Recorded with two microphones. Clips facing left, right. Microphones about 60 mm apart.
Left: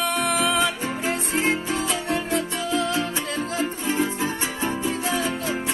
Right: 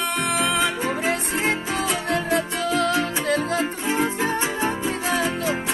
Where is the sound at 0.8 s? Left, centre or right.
Right.